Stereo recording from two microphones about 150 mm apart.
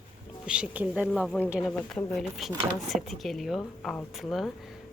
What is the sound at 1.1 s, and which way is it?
Speech, centre (ahead or behind).